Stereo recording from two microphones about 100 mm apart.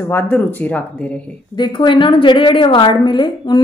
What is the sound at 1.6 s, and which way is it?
A woman's voice, 50° left (ahead or behind).